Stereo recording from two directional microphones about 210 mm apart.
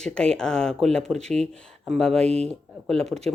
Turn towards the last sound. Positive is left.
turn(degrees=0)  # may be behind; listen again after turning